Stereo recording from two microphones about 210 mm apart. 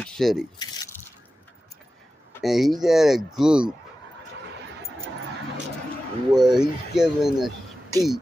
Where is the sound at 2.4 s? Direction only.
Centre (ahead or behind).